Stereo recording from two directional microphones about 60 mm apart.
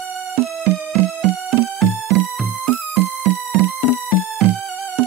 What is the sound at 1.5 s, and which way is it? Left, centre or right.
Music, centre.